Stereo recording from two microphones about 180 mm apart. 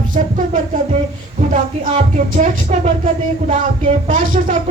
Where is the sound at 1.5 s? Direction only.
40° right (ahead or behind).